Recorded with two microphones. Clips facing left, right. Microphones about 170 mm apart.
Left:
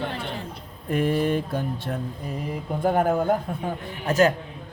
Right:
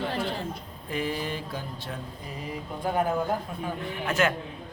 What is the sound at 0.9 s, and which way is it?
A man's voice, 55° left (ahead or behind).